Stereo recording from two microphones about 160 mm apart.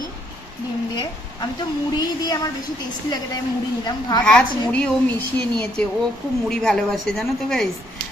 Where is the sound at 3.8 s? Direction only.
25° left (ahead or behind).